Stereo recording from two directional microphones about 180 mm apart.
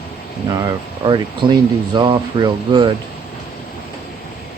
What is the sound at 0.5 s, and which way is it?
Speech, 20° right (ahead or behind).